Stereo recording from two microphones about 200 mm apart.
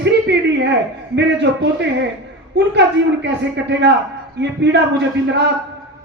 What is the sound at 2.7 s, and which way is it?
A man's voice, 60° right (ahead or behind).